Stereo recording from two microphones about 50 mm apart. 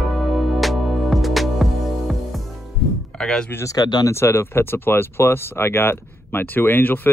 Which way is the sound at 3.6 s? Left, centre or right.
Left.